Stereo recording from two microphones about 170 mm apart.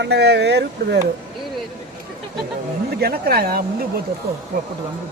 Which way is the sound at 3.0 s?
65° right (ahead or behind).